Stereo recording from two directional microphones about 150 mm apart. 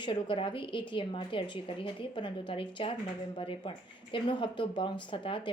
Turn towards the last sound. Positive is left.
turn(degrees=35)  # may be behind; listen again after turning